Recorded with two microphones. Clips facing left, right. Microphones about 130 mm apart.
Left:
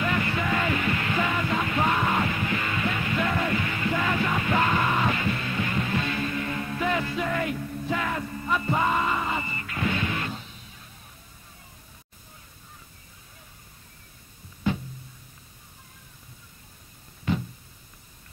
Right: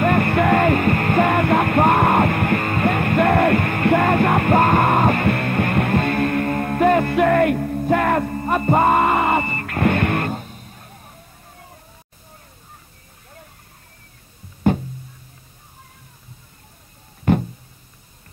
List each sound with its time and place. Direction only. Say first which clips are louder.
0.0 s music: right 10 dB; 55° right (ahead or behind)
14.7 s music: right 9 dB; 55° right (ahead or behind)
17.2 s a sound: right 10 dB; 55° right (ahead or behind)